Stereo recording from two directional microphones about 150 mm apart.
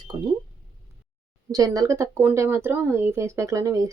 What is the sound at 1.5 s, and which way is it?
Speech, 25° right (ahead or behind).